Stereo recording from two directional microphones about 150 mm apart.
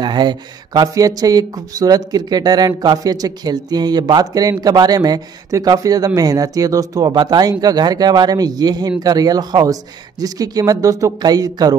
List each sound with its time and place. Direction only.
0.0 s speech: 30° right (ahead or behind)